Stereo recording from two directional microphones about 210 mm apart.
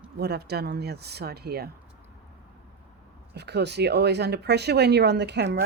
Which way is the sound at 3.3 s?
50° right (ahead or behind).